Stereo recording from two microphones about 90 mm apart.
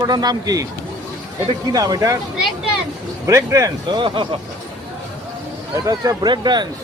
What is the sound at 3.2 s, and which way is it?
Speech, 35° right (ahead or behind).